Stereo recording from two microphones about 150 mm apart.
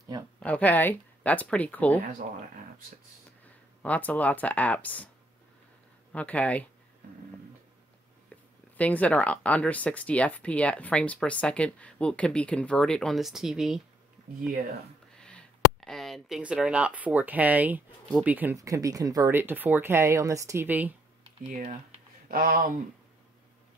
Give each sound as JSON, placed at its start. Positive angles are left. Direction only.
{"t": 0.4, "sound": "speech", "side_deg": 10}
{"t": 3.8, "sound": "speech", "side_deg": 10}
{"t": 6.1, "sound": "speech", "side_deg": 10}
{"t": 8.7, "sound": "speech", "side_deg": 10}
{"t": 15.1, "sound": "speech", "side_deg": 5}
{"t": 21.5, "sound": "speech", "side_deg": -60}
{"t": 22.3, "sound": "speech", "side_deg": -70}